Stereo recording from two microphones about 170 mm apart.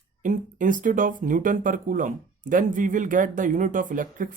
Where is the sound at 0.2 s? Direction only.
50° right (ahead or behind).